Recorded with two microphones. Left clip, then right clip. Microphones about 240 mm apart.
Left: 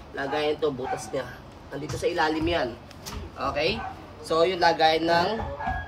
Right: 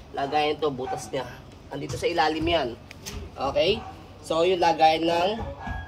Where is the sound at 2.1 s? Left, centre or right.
Right.